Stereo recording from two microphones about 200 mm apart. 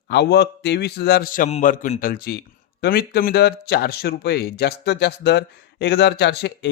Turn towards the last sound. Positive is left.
turn(degrees=60)  # may be behind; listen again after turning